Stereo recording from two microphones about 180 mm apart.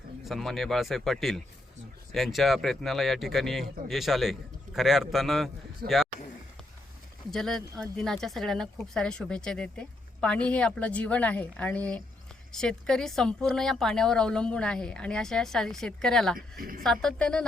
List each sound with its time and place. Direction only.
0.3 s speech: centre (ahead or behind)
5.8 s speech: 55° right (ahead or behind)
7.3 s a woman's voice: centre (ahead or behind)
16.6 s speech: 50° right (ahead or behind)
16.8 s speech: 5° left (ahead or behind)